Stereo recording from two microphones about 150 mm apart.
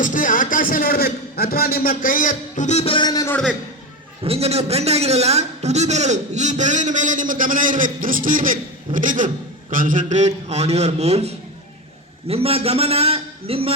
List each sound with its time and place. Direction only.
0.0 s a man's voice: 60° left (ahead or behind); by 3.3 s 25° left (ahead or behind)
4.2 s a man's voice: 40° right (ahead or behind)